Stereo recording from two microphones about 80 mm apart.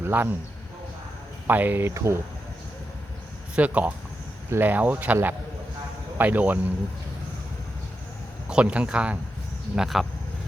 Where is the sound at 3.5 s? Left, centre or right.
Centre.